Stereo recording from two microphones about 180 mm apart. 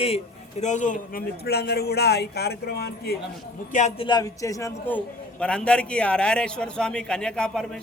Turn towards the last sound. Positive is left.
turn(degrees=5)  # may be behind; listen again after turning